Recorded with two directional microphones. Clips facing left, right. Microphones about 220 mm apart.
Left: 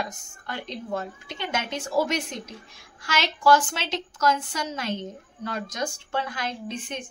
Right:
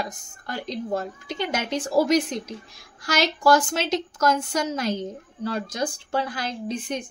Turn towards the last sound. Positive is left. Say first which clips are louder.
# right 5 dB
turn(degrees=-35)  # may be behind; listen again after turning